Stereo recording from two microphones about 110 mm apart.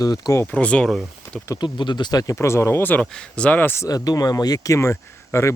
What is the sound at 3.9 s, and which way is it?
Speech, 35° left (ahead or behind).